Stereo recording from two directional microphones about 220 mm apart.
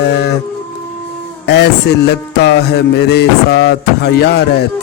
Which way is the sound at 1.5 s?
50° left (ahead or behind).